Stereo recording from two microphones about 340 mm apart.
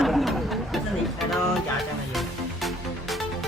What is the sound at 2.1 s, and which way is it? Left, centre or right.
Music, centre.